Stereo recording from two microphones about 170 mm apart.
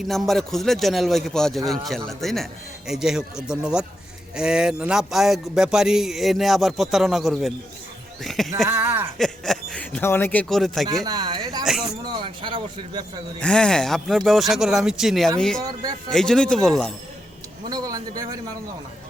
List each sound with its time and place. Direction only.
0.1 s speech: centre (ahead or behind)
8.6 s speech: 15° right (ahead or behind)
9.1 s speech: centre (ahead or behind)
10.5 s speech: centre (ahead or behind)
11.0 s speech: 25° right (ahead or behind)
11.6 s speech: 5° right (ahead or behind)
12.0 s speech: 25° right (ahead or behind)
13.4 s speech: 5° left (ahead or behind)
15.6 s speech: 20° right (ahead or behind)
16.0 s speech: 5° left (ahead or behind)
17.7 s a man's voice: 20° right (ahead or behind)